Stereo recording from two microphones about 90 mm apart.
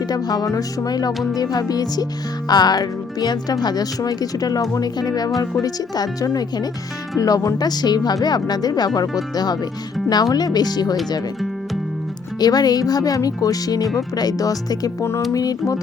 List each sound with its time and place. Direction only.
0.1 s speech: 45° left (ahead or behind)
12.4 s speech: 45° left (ahead or behind)
15.3 s music: 40° left (ahead or behind)